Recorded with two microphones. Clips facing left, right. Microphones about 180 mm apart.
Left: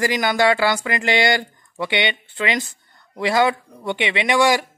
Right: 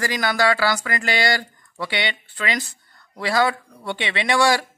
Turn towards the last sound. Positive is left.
turn(degrees=15)  # may be behind; listen again after turning